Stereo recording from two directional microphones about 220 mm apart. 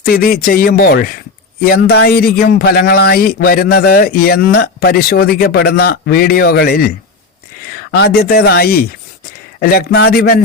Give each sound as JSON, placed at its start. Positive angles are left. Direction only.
{"t": 0.1, "sound": "a man's voice", "side_deg": 45}